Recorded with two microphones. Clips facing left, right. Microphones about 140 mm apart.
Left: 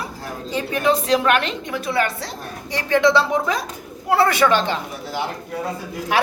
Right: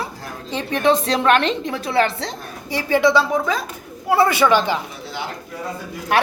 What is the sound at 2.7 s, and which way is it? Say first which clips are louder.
Speech: even; 5° right (ahead or behind).